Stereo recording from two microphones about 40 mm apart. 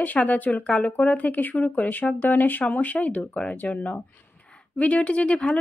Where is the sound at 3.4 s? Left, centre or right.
Left.